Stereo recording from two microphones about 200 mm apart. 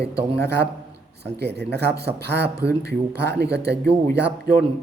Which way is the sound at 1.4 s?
55° right (ahead or behind).